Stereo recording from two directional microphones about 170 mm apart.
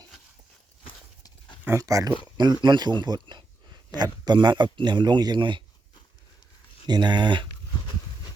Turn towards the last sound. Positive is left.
turn(degrees=-25)  # may be behind; listen again after turning